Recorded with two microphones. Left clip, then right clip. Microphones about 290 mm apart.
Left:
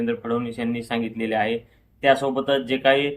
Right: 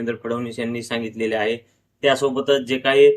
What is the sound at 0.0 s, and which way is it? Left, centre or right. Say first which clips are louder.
Speech: even; centre.